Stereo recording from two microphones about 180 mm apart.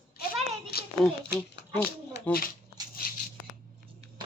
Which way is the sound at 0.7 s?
60° left (ahead or behind).